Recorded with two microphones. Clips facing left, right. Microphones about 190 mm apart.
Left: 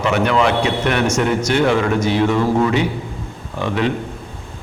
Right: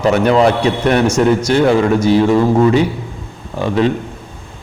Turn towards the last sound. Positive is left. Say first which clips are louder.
# right 5 dB
turn(degrees=-35)  # may be behind; listen again after turning